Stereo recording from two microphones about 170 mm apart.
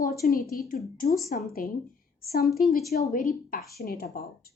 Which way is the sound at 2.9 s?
55° left (ahead or behind).